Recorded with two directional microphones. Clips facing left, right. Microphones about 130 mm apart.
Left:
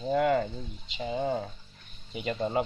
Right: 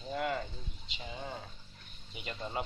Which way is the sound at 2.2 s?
85° left.